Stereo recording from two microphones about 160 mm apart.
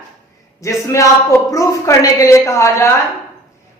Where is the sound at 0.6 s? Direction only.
20° left (ahead or behind).